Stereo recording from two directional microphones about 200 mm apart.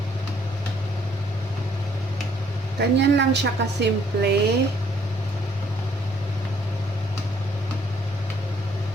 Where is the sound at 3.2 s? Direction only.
60° right (ahead or behind).